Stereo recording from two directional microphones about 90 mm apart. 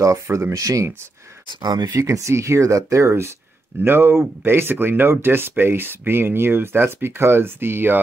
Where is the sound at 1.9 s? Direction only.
30° right (ahead or behind).